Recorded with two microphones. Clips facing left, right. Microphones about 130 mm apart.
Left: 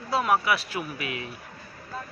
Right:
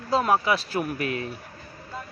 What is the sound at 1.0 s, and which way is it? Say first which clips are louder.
Speech: right 5 dB; 40° right (ahead or behind).